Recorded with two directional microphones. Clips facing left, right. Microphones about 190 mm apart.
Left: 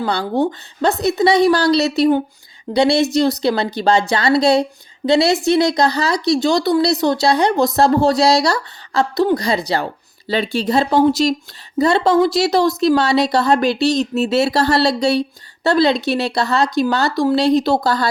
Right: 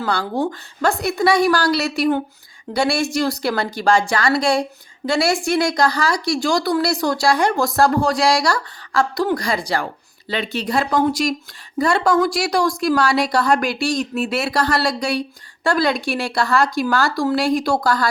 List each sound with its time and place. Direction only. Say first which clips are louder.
0.0 s speech: left 3 dB; 20° left (ahead or behind)